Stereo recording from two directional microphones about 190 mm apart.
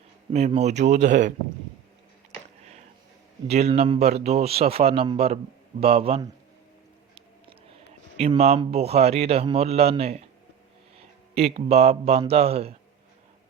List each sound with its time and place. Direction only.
0.3 s a man's voice: 35° right (ahead or behind)
3.4 s a man's voice: 35° right (ahead or behind)
8.2 s a man's voice: 35° right (ahead or behind)